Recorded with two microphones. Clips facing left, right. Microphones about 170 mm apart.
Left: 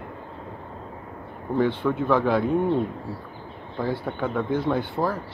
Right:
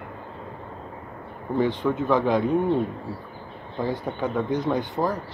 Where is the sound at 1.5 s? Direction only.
15° right (ahead or behind).